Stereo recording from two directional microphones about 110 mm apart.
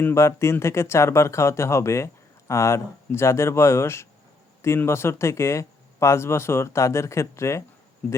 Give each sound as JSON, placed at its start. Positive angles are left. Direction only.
{"t": 0.0, "sound": "speech", "side_deg": 25}